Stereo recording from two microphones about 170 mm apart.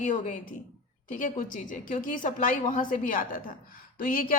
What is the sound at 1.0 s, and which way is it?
A woman's voice, 50° left (ahead or behind).